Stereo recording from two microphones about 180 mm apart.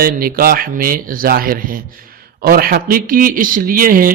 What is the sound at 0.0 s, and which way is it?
Speech, 55° right (ahead or behind).